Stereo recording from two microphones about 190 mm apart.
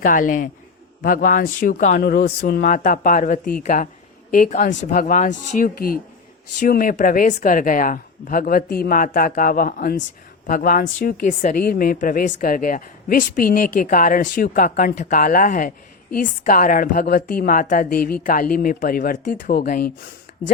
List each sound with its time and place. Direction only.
0.0 s speech: 45° left (ahead or behind)